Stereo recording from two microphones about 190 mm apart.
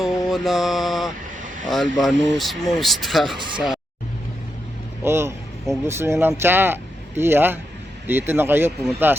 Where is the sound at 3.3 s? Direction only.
25° right (ahead or behind).